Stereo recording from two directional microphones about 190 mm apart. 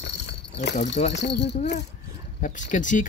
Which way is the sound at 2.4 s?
40° left (ahead or behind).